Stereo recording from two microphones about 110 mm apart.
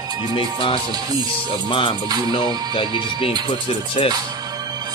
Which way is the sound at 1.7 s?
50° left (ahead or behind).